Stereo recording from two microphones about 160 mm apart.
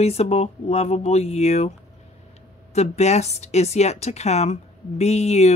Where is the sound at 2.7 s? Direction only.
45° left (ahead or behind).